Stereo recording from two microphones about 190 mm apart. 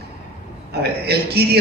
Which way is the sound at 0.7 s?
55° right (ahead or behind).